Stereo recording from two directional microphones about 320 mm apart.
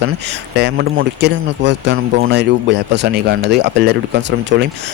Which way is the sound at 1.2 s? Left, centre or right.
Right.